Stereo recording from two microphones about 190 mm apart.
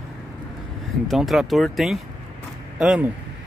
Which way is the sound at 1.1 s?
Centre (ahead or behind).